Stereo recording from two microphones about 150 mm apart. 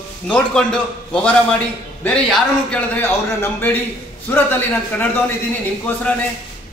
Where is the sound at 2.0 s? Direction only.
5° left (ahead or behind).